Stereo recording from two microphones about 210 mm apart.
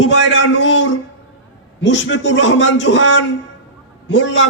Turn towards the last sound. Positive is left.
turn(degrees=60)  # may be behind; listen again after turning